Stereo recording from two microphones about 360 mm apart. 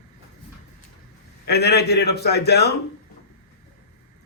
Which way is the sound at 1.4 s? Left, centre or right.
Left.